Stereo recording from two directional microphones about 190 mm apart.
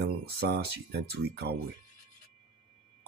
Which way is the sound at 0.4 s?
60° right (ahead or behind).